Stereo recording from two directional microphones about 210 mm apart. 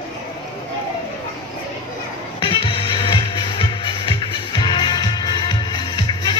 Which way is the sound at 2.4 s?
25° left (ahead or behind).